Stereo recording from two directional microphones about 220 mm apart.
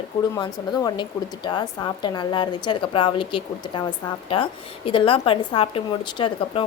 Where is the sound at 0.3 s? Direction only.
15° left (ahead or behind).